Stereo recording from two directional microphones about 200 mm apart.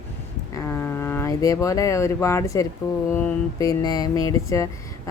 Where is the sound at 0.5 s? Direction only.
10° left (ahead or behind).